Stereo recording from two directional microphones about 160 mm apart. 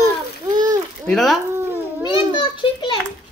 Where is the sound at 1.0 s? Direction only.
Centre (ahead or behind).